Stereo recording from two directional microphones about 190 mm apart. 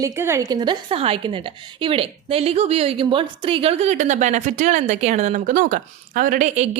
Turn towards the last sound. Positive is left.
turn(degrees=-45)  # may be behind; listen again after turning